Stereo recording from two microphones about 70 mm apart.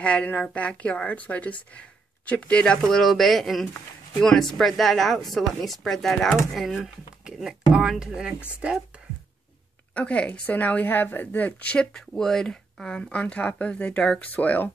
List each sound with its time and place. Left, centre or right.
0.0 s a woman's voice: centre
9.9 s a woman's voice: centre